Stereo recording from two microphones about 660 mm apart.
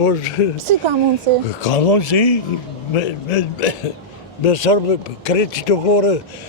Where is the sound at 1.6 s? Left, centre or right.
Left.